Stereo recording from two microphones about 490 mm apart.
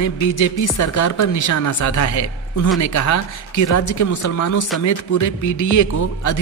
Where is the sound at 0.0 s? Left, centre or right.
Left.